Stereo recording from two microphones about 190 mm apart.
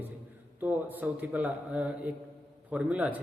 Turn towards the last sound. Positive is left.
turn(degrees=-5)  # may be behind; listen again after turning